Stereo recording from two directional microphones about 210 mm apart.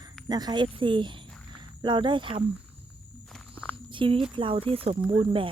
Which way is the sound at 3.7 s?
25° right (ahead or behind).